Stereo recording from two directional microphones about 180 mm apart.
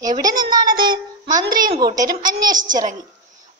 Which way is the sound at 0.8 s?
25° right (ahead or behind).